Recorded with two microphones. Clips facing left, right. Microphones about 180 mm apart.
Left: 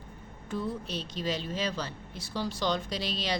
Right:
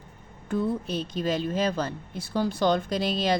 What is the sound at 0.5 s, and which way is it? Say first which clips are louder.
A woman's voice: right 7 dB; 50° right (ahead or behind).